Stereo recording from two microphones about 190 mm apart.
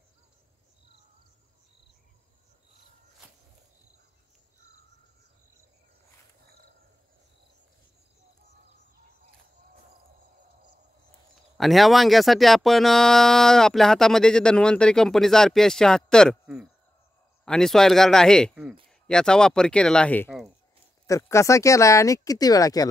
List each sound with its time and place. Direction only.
11.5 s speech: centre (ahead or behind); by 22.8 s 20° left (ahead or behind)